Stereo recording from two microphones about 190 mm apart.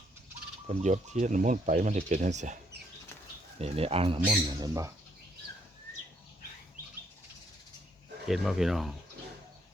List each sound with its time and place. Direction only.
0.7 s speech: 35° right (ahead or behind)
3.6 s speech: 30° right (ahead or behind)
4.4 s speech: 20° right (ahead or behind)
8.3 s speech: centre (ahead or behind)